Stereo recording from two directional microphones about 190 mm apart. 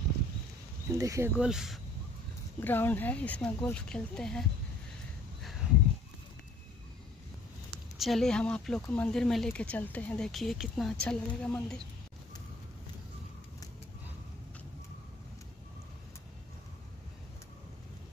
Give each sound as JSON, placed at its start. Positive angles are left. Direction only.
{"t": 0.9, "sound": "speech", "side_deg": -15}
{"t": 1.4, "sound": "speech", "side_deg": -5}
{"t": 2.6, "sound": "speech", "side_deg": 10}
{"t": 5.6, "sound": "a sound", "side_deg": -5}
{"t": 8.0, "sound": "speech", "side_deg": 0}